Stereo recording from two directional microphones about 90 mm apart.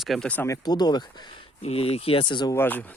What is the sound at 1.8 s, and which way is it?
Speech, 90° left.